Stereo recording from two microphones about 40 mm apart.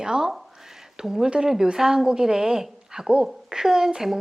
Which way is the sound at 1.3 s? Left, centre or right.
Centre.